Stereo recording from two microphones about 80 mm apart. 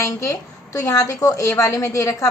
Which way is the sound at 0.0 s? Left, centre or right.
Left.